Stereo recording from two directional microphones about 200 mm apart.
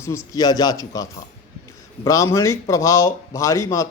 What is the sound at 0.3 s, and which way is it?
Speech, 20° left (ahead or behind).